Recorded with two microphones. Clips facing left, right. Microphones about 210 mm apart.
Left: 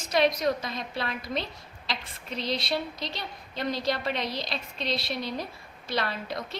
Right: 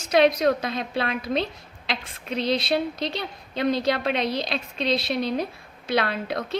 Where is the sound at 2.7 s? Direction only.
60° right (ahead or behind).